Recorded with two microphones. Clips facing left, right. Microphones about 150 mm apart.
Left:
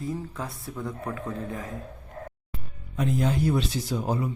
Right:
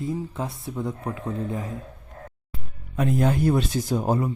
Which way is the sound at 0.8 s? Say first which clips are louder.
Right 3 dB; 20° right (ahead or behind).